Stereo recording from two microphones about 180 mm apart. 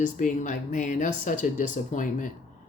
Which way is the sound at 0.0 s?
45° left (ahead or behind).